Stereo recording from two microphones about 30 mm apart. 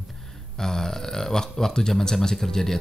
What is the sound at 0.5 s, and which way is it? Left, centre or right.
Speech, centre.